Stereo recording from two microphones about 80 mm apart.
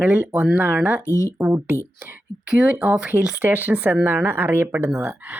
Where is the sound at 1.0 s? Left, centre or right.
Left.